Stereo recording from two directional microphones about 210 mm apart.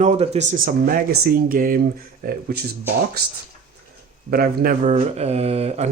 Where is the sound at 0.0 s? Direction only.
35° right (ahead or behind); by 2.6 s 50° right (ahead or behind).